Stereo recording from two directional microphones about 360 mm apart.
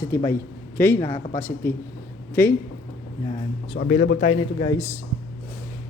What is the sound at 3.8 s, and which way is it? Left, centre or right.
Speech, left.